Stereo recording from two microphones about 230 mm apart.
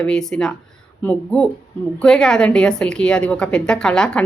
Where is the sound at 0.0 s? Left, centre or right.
Centre.